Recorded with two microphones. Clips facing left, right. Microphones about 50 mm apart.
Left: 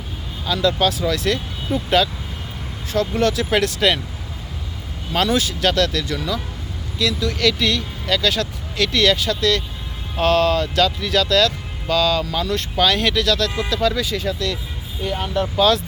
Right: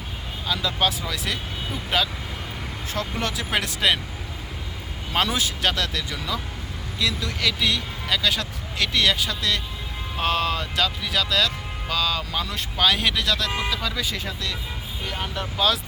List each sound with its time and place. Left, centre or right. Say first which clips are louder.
0.4 s speech: left 6 dB; centre
2.9 s speech: left 9 dB; right
5.1 s speech: left 4 dB; centre
14.3 s speech: left 7 dB; centre